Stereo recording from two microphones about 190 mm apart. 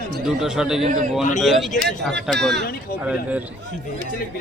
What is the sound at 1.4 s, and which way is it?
Speech, centre (ahead or behind).